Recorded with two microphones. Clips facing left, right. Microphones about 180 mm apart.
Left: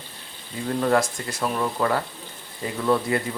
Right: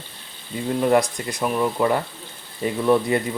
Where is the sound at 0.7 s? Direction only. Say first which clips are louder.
Right 3 dB; 15° right (ahead or behind).